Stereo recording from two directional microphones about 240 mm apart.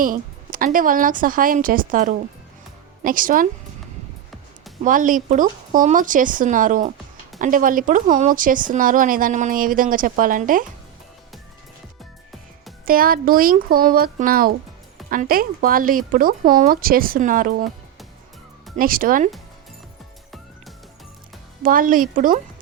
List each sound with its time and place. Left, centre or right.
0.0 s speech: right
4.8 s speech: right
12.8 s speech: right
18.8 s speech: right
21.6 s speech: right